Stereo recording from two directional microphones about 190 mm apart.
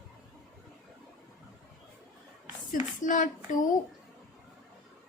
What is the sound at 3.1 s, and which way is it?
Speech, 40° left (ahead or behind).